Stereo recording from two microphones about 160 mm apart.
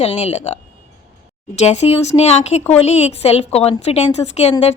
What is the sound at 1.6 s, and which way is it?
A woman's voice, 40° left (ahead or behind).